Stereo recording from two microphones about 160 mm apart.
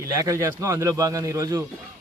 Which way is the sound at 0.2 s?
20° right (ahead or behind).